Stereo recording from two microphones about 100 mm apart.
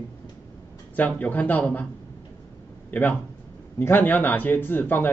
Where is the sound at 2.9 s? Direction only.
20° left (ahead or behind).